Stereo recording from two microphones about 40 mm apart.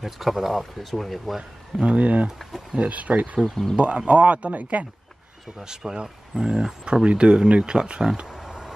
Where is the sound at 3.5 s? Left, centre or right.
Centre.